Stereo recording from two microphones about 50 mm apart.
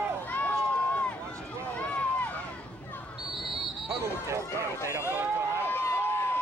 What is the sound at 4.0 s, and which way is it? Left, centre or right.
Speech, right.